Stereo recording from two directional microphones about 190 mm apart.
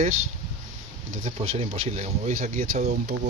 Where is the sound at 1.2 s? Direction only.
30° right (ahead or behind).